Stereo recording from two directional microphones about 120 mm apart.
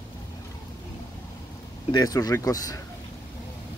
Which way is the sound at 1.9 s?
30° left (ahead or behind).